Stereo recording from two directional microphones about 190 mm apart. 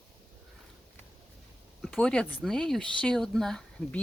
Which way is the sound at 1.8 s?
5° left (ahead or behind).